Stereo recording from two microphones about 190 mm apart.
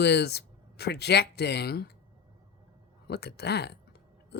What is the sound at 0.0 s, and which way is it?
Speech, 60° left (ahead or behind).